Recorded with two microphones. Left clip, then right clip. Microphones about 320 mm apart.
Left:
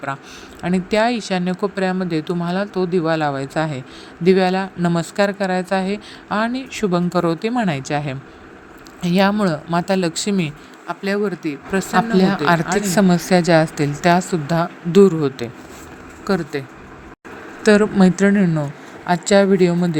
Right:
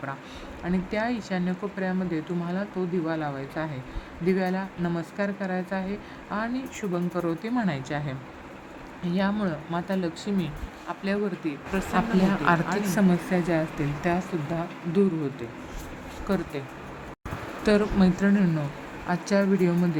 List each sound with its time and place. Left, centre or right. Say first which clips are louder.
0.6 s speech: left 11 dB; centre